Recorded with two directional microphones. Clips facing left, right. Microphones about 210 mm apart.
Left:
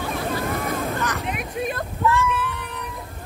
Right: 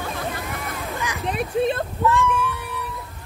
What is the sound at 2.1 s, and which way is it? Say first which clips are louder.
Cat: right 2 dB; 15° right (ahead or behind).